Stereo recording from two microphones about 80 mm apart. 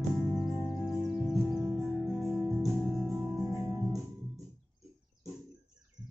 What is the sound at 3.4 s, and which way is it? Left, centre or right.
Music, right.